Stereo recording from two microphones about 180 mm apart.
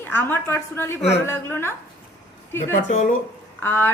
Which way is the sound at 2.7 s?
45° left (ahead or behind).